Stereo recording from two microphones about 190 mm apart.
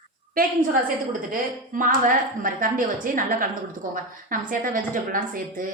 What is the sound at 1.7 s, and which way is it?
A woman's voice, 45° right (ahead or behind).